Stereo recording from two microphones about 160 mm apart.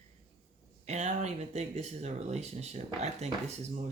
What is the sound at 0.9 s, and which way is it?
Speech, 45° right (ahead or behind).